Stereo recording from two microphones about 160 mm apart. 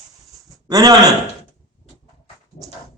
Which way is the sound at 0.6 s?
25° right (ahead or behind).